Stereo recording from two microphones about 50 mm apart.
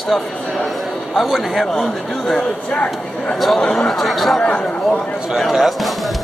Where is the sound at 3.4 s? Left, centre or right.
Centre.